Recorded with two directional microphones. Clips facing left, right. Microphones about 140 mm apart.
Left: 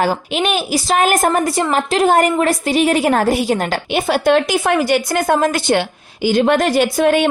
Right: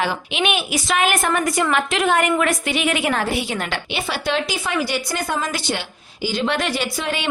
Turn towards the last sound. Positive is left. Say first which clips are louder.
# left 11 dB
turn(degrees=50)  # may be behind; listen again after turning